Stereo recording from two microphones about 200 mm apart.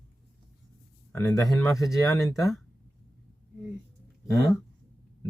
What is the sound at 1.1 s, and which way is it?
Speech, 15° left (ahead or behind).